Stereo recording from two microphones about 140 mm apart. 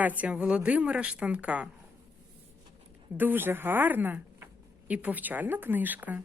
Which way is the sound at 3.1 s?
15° right (ahead or behind).